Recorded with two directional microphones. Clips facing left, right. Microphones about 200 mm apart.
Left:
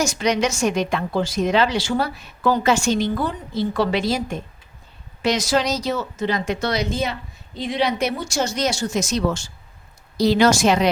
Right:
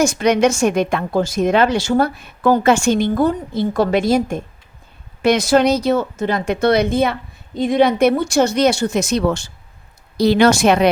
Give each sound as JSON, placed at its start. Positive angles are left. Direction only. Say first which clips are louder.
{"t": 0.0, "sound": "a woman's voice", "louder": "right 6 dB", "side_deg": -55}